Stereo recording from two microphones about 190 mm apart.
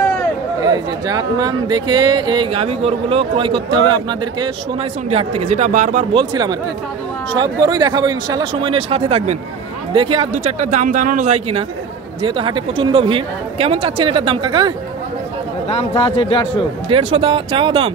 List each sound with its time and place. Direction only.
1.0 s speech: 20° right (ahead or behind); by 6.0 s 40° right (ahead or behind)
6.1 s speech: 25° right (ahead or behind)
15.7 s a man's voice: 30° left (ahead or behind)
16.9 s speech: 30° right (ahead or behind)